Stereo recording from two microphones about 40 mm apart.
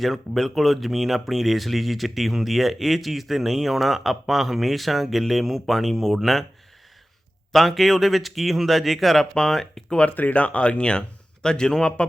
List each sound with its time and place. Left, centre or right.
0.0 s speech: centre
7.5 s speech: centre
9.3 s speech: centre
10.1 s speech: left